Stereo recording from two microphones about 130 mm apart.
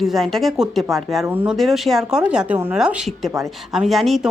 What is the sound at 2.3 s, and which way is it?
Speech, 10° right (ahead or behind).